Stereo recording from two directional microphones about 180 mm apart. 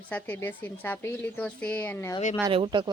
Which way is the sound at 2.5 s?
30° right (ahead or behind).